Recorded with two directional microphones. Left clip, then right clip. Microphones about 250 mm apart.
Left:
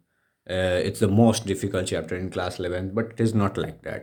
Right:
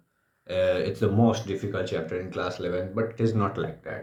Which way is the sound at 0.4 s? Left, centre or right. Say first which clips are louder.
Even; left.